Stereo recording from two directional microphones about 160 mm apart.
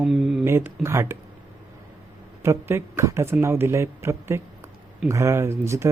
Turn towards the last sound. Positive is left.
turn(degrees=-15)  # may be behind; listen again after turning